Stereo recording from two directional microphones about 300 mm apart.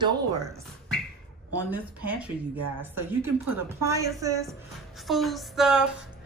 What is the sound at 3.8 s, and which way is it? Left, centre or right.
Speech, centre.